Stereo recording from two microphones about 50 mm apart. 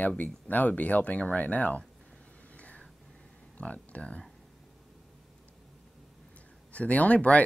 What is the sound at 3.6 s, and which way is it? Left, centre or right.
Speech, left.